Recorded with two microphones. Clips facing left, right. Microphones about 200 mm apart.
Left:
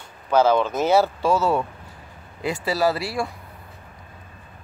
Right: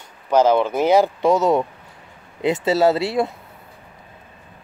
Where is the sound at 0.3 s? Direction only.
10° right (ahead or behind).